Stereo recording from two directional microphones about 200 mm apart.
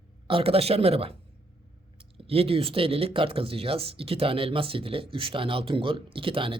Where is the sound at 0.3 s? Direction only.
30° right (ahead or behind).